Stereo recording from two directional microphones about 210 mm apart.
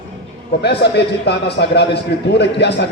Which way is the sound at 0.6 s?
55° left (ahead or behind).